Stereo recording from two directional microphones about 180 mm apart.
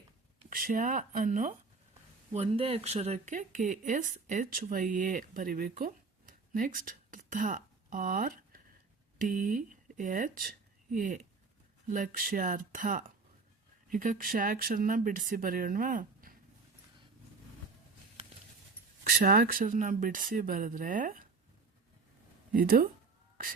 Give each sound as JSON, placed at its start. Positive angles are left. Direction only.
{"t": 0.5, "sound": "speech", "side_deg": -50}
{"t": 2.3, "sound": "speech", "side_deg": -35}
{"t": 19.0, "sound": "speech", "side_deg": -55}
{"t": 22.5, "sound": "speech", "side_deg": -50}